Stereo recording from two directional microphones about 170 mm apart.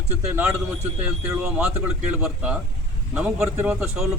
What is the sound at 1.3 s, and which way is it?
Speech, 5° right (ahead or behind).